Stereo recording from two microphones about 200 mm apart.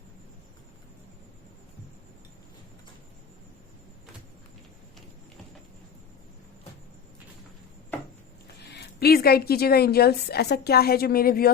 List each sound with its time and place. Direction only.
8.7 s a woman's voice: 55° left (ahead or behind)